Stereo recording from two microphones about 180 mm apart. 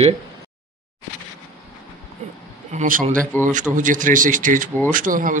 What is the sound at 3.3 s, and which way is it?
Speech, 10° left (ahead or behind).